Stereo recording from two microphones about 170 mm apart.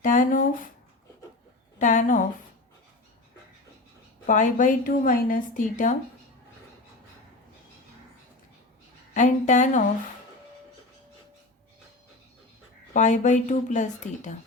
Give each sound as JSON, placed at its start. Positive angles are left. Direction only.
{"t": 0.0, "sound": "speech", "side_deg": 50}
{"t": 1.8, "sound": "a sound", "side_deg": 50}
{"t": 4.3, "sound": "speech", "side_deg": 50}
{"t": 9.1, "sound": "a woman's voice", "side_deg": 45}
{"t": 12.9, "sound": "speech", "side_deg": 45}